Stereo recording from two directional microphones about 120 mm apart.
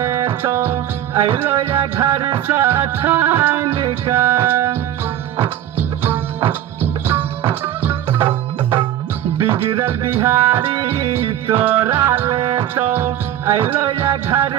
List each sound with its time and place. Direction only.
0.0 s music: 25° right (ahead or behind)
9.8 s music: 20° right (ahead or behind)